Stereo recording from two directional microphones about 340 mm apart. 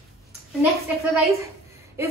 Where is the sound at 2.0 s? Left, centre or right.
Centre.